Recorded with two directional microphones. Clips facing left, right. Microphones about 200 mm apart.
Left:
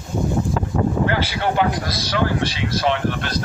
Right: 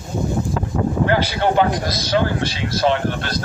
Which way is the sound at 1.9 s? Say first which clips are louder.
Right 2 dB; 25° right (ahead or behind).